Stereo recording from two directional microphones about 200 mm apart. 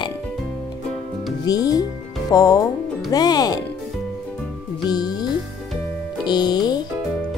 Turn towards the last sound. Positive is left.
turn(degrees=20)  # may be behind; listen again after turning